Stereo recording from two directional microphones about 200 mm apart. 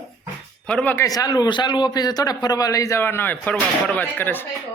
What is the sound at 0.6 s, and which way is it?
A man's voice, 5° left (ahead or behind).